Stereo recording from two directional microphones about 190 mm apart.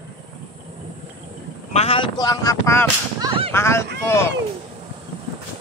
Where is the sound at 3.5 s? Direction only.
15° left (ahead or behind).